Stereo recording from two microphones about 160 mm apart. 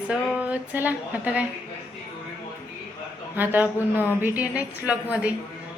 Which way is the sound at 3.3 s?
10° right (ahead or behind).